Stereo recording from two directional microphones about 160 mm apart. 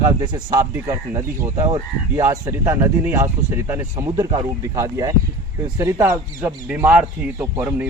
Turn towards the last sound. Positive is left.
turn(degrees=-15)  # may be behind; listen again after turning